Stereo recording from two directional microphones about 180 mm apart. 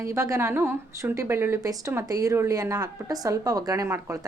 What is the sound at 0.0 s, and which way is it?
A woman's voice, 15° right (ahead or behind).